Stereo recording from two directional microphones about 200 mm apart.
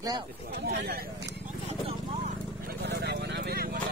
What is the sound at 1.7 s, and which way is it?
Vehicle, 30° right (ahead or behind).